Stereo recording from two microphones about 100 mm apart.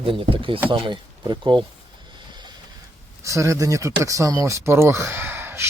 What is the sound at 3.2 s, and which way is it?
Speech, 30° right (ahead or behind).